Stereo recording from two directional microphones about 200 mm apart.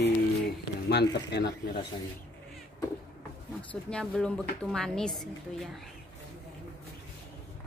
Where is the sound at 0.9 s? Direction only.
55° left (ahead or behind).